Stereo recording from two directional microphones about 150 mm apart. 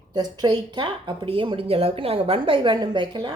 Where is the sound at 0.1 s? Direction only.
30° right (ahead or behind).